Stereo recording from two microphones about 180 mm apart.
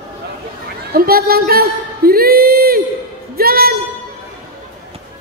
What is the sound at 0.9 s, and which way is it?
Speech, 55° right (ahead or behind).